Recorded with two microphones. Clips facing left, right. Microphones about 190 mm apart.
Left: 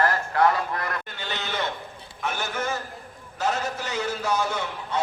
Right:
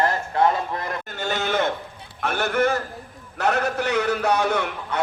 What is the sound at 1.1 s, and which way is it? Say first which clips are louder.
A man's voice: right 8 dB; 45° right (ahead or behind).